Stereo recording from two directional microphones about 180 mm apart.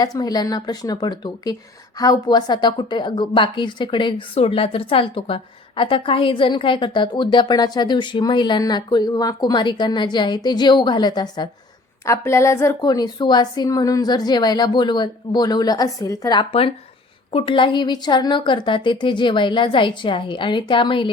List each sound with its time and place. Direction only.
0.0 s a woman's voice: 20° left (ahead or behind)